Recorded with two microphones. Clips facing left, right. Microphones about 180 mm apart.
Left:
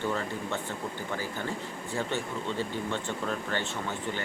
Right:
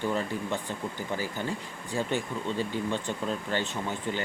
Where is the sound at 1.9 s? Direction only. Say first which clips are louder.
Right 3 dB; 15° right (ahead or behind).